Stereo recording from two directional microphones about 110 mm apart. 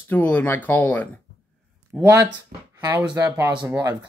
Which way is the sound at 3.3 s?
30° right (ahead or behind).